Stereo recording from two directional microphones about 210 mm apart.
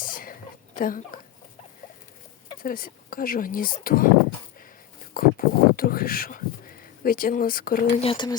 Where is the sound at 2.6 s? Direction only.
40° left (ahead or behind).